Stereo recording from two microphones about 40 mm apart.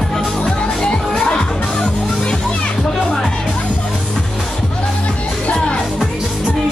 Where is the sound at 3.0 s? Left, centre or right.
Centre.